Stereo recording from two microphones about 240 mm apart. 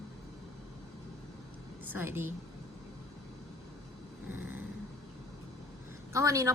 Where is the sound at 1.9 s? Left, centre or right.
Centre.